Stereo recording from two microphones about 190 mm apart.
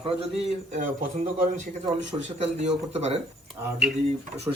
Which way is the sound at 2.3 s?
35° right (ahead or behind).